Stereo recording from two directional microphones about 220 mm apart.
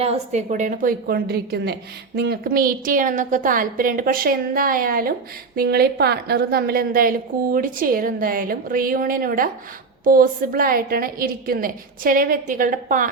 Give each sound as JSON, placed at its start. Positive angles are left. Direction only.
{"t": 0.0, "sound": "a woman's voice", "side_deg": -30}